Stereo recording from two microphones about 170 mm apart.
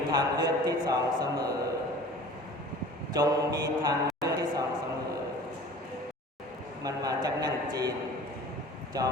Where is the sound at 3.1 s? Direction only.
20° right (ahead or behind).